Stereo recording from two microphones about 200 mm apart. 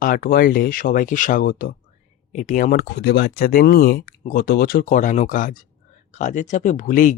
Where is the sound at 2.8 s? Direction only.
55° left (ahead or behind).